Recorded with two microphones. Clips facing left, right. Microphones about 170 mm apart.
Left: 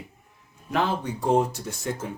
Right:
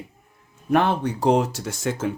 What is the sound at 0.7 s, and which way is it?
Speech, 60° right (ahead or behind).